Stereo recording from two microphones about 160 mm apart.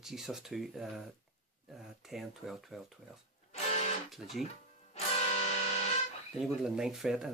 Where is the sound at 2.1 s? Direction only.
Centre (ahead or behind).